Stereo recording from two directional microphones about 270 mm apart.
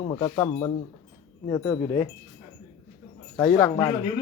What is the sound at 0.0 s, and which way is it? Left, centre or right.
Speech, centre.